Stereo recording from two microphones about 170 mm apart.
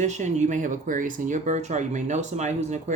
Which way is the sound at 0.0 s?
45° right (ahead or behind).